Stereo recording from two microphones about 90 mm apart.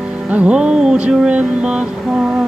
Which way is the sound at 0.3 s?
15° right (ahead or behind).